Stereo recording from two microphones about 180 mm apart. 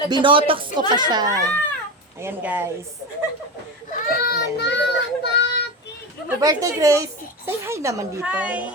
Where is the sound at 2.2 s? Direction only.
10° right (ahead or behind).